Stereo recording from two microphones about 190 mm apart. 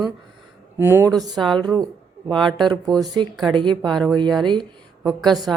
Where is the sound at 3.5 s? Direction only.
25° right (ahead or behind).